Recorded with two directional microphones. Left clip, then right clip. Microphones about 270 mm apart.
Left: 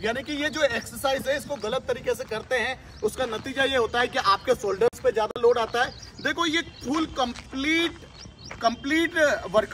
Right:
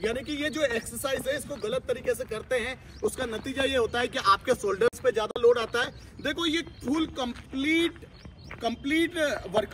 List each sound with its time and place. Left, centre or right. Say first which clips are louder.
0.0 s speech: left 3 dB; centre